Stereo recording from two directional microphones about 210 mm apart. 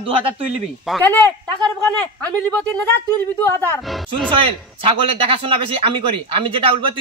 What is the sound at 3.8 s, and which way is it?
Speech, centre (ahead or behind).